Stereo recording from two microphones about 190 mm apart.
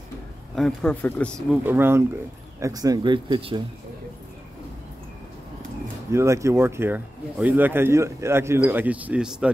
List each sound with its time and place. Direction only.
0.6 s speech: 5° left (ahead or behind)
1.5 s speech: 10° right (ahead or behind); by 3.6 s 25° right (ahead or behind)
6.1 s speech: 15° right (ahead or behind)